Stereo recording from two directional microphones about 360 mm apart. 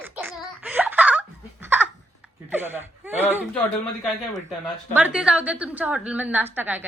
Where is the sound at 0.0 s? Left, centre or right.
Centre.